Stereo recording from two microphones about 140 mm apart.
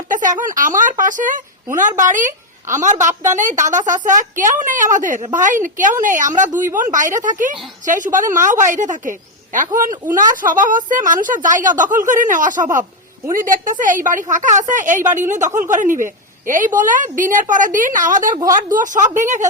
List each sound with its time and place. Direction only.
0.1 s a woman's voice: 65° right (ahead or behind)